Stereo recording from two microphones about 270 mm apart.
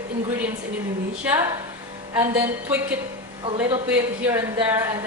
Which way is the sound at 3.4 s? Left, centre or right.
Centre.